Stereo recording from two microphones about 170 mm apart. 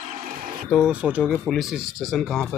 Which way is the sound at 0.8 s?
5° right (ahead or behind).